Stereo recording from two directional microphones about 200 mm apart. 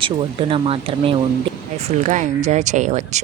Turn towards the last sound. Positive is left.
turn(degrees=-35)  # may be behind; listen again after turning